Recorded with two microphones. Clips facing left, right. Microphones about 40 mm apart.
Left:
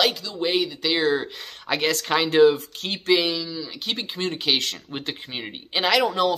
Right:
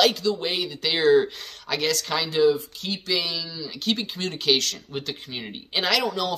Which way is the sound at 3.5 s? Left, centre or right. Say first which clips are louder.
Right 2 dB; centre.